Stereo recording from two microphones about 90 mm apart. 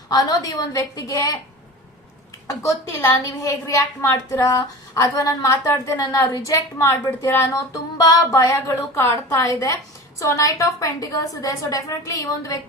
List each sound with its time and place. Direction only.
0.1 s a woman's voice: 45° left (ahead or behind)
2.5 s a woman's voice: 35° left (ahead or behind)
4.0 s a woman's voice: 25° left (ahead or behind)
4.9 s a woman's voice: 40° left (ahead or behind)
7.9 s a woman's voice: 45° left (ahead or behind)
8.6 s a woman's voice: 30° left (ahead or behind)